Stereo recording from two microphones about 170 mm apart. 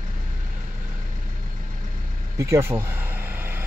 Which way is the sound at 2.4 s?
15° right (ahead or behind).